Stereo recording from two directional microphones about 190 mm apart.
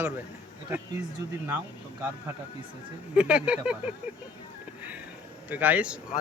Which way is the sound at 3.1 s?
5° right (ahead or behind).